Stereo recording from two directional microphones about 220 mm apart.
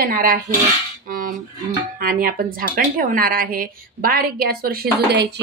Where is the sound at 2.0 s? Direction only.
40° right (ahead or behind).